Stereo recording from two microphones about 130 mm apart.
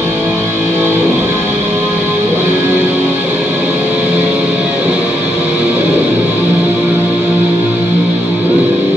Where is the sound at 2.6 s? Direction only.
15° right (ahead or behind).